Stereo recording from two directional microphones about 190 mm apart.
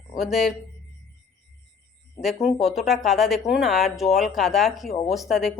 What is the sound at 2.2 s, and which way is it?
Speech, centre (ahead or behind).